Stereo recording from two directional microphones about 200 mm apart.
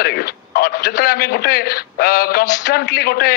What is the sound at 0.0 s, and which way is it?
A man's voice, 50° left (ahead or behind).